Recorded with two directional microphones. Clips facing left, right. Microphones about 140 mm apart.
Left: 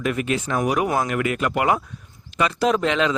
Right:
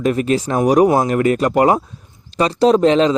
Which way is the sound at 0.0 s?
35° right (ahead or behind).